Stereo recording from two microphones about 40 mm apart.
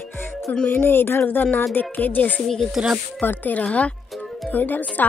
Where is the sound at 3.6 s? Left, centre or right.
Left.